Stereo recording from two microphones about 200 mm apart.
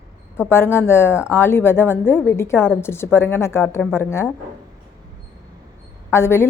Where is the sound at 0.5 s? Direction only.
10° left (ahead or behind).